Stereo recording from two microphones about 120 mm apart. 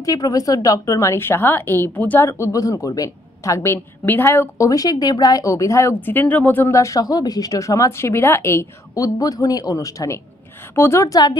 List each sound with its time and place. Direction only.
0.0 s speech: 30° left (ahead or behind)